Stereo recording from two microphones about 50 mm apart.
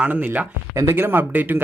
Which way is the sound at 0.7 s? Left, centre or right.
Right.